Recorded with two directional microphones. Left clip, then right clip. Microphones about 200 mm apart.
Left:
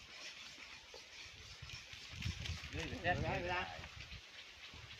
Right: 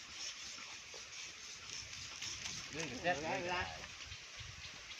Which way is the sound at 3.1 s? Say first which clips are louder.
Right 1 dB; 30° right (ahead or behind).